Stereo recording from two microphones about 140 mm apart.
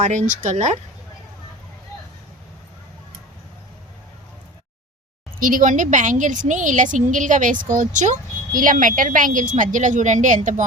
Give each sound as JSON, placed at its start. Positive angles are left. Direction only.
{"t": 0.0, "sound": "a woman's voice", "side_deg": -60}
{"t": 5.4, "sound": "a woman's voice", "side_deg": -75}